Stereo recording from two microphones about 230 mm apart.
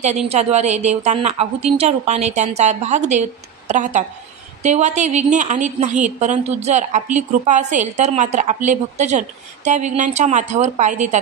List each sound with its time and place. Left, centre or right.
0.0 s a woman's voice: right